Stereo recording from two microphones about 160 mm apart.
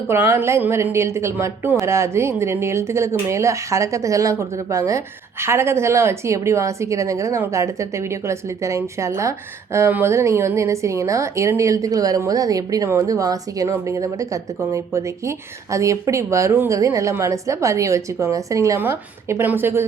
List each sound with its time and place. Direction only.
0.1 s a woman's voice: 15° right (ahead or behind)